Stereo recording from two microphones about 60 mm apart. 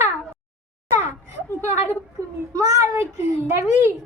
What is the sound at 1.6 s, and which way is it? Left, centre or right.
Speech, right.